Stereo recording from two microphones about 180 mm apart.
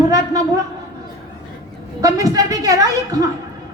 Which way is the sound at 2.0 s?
20° right (ahead or behind).